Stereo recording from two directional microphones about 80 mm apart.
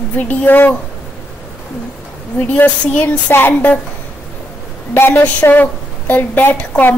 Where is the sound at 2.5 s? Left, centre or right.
Centre.